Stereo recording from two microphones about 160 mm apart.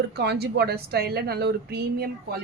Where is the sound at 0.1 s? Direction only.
90° right.